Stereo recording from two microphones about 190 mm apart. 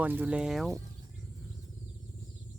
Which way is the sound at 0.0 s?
10° right (ahead or behind).